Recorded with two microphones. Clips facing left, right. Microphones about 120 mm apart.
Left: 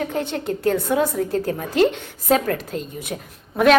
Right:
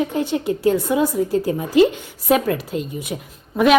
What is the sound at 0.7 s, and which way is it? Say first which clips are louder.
A woman's voice: left 1 dB; 5° right (ahead or behind).